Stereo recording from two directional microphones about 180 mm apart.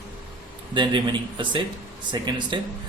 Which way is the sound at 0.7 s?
25° right (ahead or behind).